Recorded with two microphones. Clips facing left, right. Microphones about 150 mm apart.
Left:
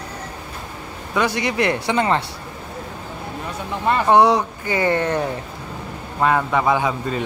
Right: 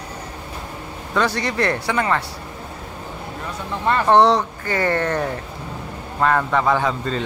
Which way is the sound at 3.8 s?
10° left (ahead or behind).